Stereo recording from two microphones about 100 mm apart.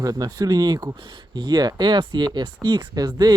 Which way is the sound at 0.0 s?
40° right (ahead or behind).